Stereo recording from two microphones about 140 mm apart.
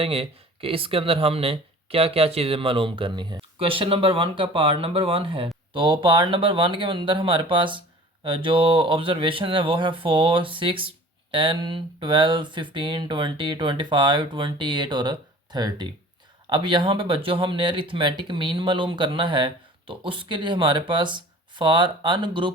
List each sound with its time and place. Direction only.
0.0 s speech: 40° right (ahead or behind)